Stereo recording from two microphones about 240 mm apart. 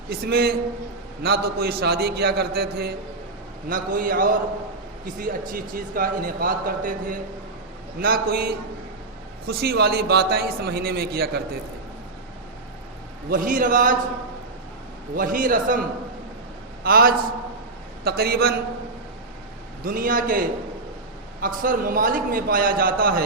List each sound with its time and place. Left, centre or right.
0.1 s a man's voice: right
13.3 s a man's voice: right
15.1 s a man's voice: right
16.8 s a man's voice: right
19.8 s a man's voice: right
21.4 s a man's voice: right